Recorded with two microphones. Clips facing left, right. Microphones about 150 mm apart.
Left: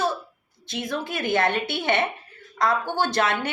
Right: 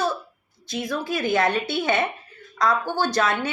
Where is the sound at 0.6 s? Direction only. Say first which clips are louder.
Right 1 dB; 20° left (ahead or behind).